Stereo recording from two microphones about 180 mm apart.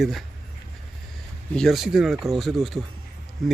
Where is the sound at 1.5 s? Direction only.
Centre (ahead or behind).